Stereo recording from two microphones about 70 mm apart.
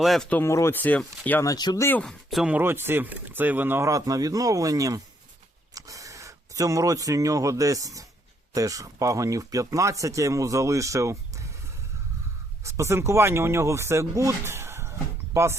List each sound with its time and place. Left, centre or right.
0.0 s speech: centre
0.4 s speech: left
0.8 s speech: left
1.5 s speech: left
2.5 s speech: right
3.8 s speech: right
12.6 s speech: right